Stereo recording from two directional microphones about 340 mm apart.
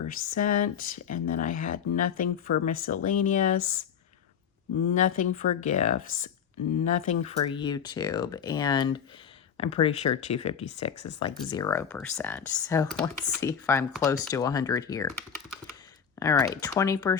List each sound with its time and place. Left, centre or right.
0.3 s speech: left
3.6 s speech: left
4.9 s speech: left
16.2 s speech: centre